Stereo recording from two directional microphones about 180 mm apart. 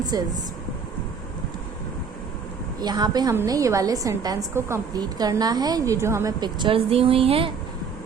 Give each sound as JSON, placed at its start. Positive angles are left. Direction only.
{"t": 0.1, "sound": "a woman's voice", "side_deg": -20}
{"t": 2.8, "sound": "a woman's voice", "side_deg": -20}